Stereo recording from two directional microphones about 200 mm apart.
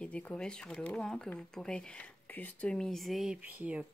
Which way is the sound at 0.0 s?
5° left (ahead or behind).